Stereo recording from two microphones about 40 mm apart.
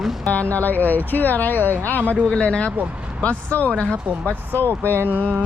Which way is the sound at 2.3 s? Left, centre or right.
Left.